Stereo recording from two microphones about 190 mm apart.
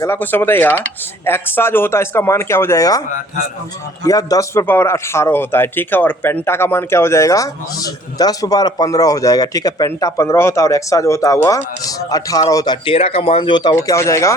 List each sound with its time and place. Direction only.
0.0 s a man's voice: 10° left (ahead or behind)
4.0 s a man's voice: 20° left (ahead or behind)